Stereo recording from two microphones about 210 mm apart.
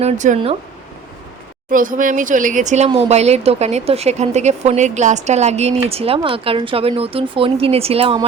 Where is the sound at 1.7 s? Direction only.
40° right (ahead or behind).